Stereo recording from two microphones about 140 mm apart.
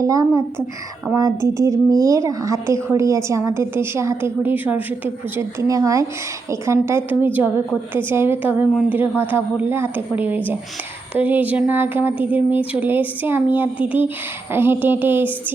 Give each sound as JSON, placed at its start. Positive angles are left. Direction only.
{"t": 0.0, "sound": "a woman's voice", "side_deg": -25}